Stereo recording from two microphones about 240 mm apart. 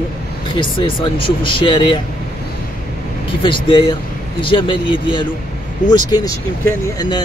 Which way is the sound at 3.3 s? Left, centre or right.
Left.